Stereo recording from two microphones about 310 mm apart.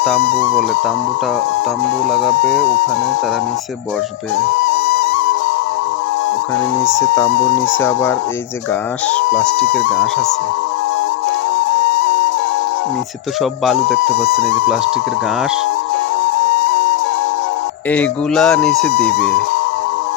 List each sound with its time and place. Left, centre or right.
4.7 s music: left
7.8 s speech: centre
9.3 s speech: centre
13.4 s speech: centre
17.9 s speech: centre